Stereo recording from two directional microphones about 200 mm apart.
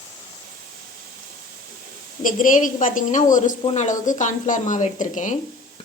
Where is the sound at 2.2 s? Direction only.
40° left (ahead or behind).